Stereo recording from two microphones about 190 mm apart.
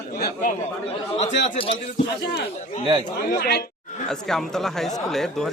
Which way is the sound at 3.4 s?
60° left (ahead or behind).